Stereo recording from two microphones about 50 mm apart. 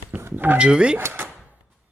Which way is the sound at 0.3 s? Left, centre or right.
Right.